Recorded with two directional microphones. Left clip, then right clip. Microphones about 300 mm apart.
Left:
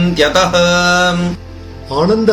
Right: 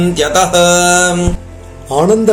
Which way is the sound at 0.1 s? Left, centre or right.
Centre.